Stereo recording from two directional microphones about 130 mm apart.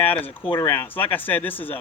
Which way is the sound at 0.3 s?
45° left (ahead or behind).